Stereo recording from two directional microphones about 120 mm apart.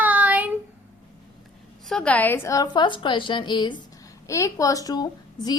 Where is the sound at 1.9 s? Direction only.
10° left (ahead or behind); by 3.8 s 40° left (ahead or behind).